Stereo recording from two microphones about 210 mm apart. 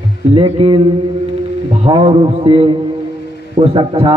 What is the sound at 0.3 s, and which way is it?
A man's voice, 25° right (ahead or behind).